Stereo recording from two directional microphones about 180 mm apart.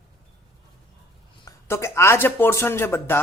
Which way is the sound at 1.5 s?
15° left (ahead or behind).